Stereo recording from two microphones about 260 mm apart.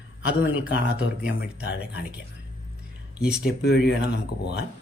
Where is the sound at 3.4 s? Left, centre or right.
Left.